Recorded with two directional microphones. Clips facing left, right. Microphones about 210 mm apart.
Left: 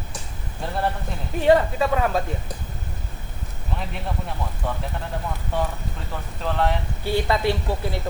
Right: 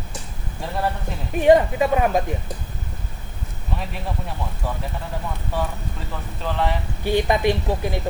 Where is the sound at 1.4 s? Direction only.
15° right (ahead or behind).